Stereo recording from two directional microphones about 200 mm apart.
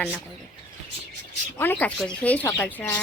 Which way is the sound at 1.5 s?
10° left (ahead or behind).